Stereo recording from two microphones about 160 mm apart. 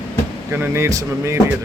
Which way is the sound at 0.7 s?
15° right (ahead or behind).